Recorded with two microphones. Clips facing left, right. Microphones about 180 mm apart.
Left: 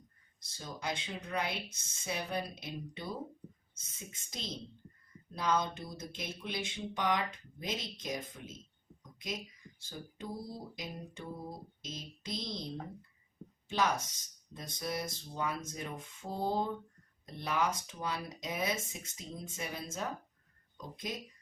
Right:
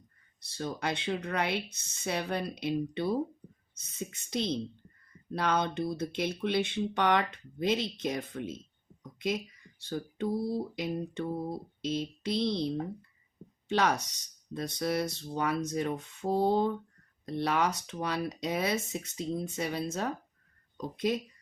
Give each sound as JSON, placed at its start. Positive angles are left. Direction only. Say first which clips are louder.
{"t": 0.5, "sound": "speech", "louder": "right 6 dB", "side_deg": -65}
{"t": 13.7, "sound": "speech", "louder": "right 4 dB", "side_deg": -70}